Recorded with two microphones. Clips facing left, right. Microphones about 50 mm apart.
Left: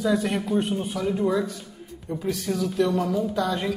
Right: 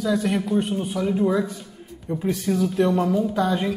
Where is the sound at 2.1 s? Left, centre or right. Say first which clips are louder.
Right 3 dB; centre.